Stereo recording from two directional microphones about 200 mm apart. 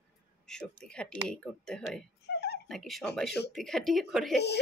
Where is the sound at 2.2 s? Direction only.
55° left (ahead or behind).